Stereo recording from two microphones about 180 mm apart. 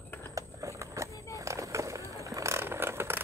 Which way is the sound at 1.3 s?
15° right (ahead or behind).